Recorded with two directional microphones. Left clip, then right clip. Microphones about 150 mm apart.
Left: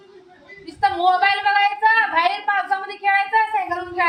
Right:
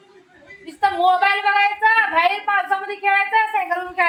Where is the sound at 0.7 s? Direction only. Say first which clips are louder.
Right 1 dB; 40° right (ahead or behind).